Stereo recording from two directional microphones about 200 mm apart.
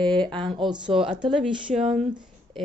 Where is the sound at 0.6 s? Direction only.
25° right (ahead or behind).